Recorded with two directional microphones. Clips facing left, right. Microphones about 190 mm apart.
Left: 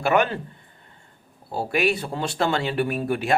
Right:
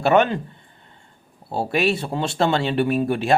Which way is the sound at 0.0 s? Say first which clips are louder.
Right 4 dB; 25° right (ahead or behind).